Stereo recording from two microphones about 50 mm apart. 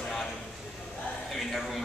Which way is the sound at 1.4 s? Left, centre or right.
Centre.